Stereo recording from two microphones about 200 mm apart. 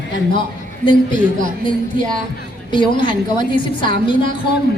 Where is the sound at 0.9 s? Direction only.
40° right (ahead or behind).